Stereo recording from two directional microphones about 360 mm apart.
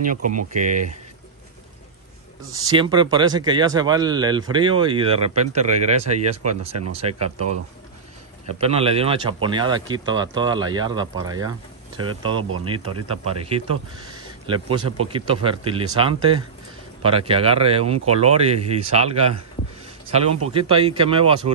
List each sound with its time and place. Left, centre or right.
0.0 s speech: right
2.5 s speech: centre
8.5 s speech: centre
14.1 s a man's voice: centre